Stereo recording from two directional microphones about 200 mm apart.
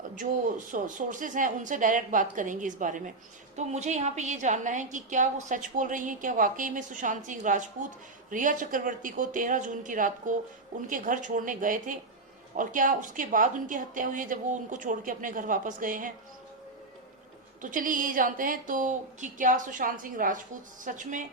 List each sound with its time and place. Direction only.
0.2 s a woman's voice: 40° right (ahead or behind)
17.6 s a woman's voice: 40° right (ahead or behind)